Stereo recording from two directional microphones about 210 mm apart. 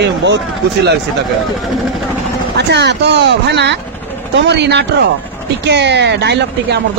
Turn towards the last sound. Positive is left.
turn(degrees=-55)  # may be behind; listen again after turning